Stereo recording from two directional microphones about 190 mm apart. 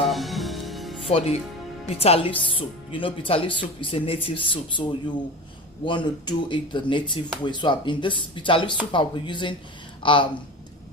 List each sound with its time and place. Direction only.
0.1 s music: centre (ahead or behind)
1.0 s speech: 30° left (ahead or behind)